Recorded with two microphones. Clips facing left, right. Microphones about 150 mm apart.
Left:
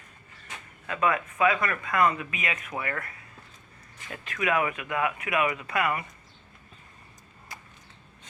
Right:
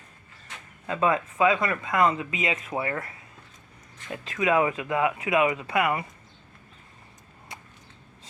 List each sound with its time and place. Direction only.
0.9 s speech: 25° right (ahead or behind)